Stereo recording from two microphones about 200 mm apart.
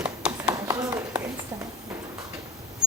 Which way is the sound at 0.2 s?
5° right (ahead or behind).